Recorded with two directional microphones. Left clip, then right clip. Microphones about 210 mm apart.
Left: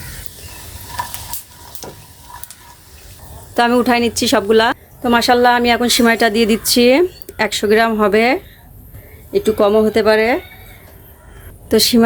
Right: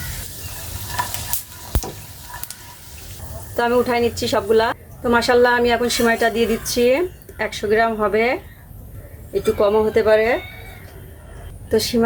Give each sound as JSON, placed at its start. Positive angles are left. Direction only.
{"t": 3.5, "sound": "a woman's voice", "side_deg": 50}
{"t": 11.7, "sound": "a woman's voice", "side_deg": 50}